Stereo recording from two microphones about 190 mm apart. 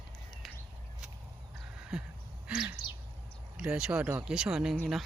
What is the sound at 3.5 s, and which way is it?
Speech, 5° right (ahead or behind).